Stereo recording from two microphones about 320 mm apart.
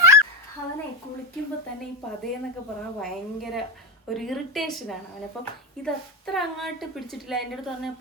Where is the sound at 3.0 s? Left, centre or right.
Centre.